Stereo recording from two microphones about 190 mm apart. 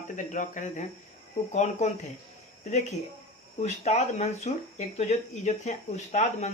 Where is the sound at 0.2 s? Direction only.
40° left (ahead or behind).